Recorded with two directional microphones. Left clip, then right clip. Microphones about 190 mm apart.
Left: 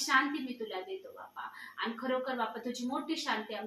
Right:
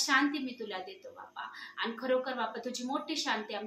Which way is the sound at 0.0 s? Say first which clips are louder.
Right 1 dB; 60° right (ahead or behind).